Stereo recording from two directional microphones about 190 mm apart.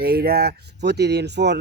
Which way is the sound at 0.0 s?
55° right (ahead or behind).